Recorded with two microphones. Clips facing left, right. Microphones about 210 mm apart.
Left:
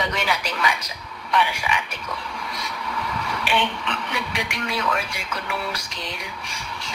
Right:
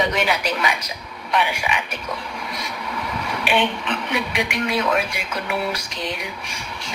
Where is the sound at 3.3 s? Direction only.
20° right (ahead or behind).